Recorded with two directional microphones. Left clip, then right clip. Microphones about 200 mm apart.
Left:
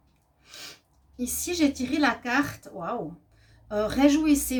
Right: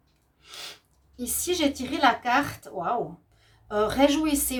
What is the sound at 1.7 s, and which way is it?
A woman's voice, 40° right (ahead or behind).